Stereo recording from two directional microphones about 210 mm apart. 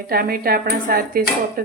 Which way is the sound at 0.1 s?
45° right (ahead or behind).